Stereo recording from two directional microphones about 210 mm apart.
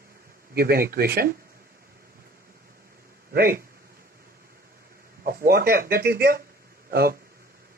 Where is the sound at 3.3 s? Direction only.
45° right (ahead or behind).